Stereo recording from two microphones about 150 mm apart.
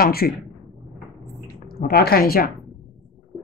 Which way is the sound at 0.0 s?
90° left.